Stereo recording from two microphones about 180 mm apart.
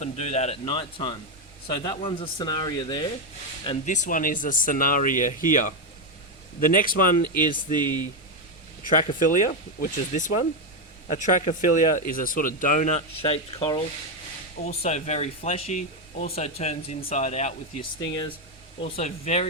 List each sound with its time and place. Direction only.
0.0 s speech: 40° left (ahead or behind)
3.8 s speech: 45° left (ahead or behind)
7.7 s speech: 25° right (ahead or behind)
9.0 s speech: 45° left (ahead or behind)
13.2 s speech: 30° left (ahead or behind)
18.0 s speech: 25° left (ahead or behind)
18.9 s speech: 35° left (ahead or behind)